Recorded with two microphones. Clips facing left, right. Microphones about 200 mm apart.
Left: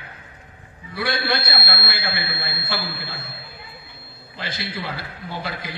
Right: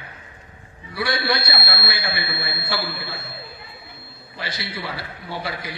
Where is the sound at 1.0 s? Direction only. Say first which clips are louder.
Right 1 dB; 55° left (ahead or behind).